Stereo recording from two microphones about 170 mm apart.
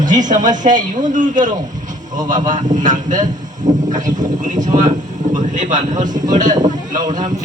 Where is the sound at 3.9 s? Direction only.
50° right (ahead or behind).